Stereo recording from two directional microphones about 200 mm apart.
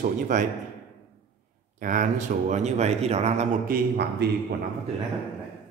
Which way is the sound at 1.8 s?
40° right (ahead or behind).